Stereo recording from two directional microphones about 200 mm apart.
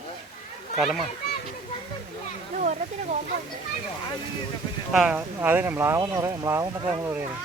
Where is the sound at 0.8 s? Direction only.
Centre (ahead or behind).